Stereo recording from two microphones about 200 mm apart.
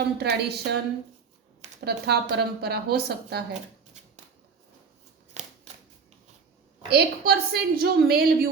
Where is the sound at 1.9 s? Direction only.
55° right (ahead or behind).